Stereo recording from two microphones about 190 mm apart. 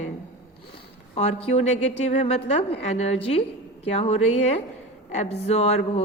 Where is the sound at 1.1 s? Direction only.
35° left (ahead or behind).